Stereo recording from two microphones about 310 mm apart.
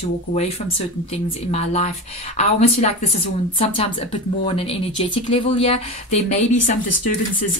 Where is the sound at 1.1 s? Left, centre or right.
Centre.